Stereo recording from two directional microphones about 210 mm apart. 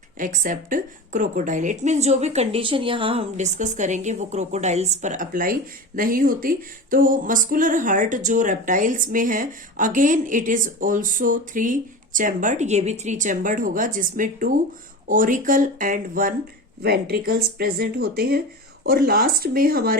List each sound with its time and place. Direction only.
0.4 s speech: 40° right (ahead or behind)